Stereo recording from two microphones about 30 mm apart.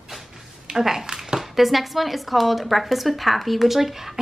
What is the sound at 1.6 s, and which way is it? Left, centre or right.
Speech, centre.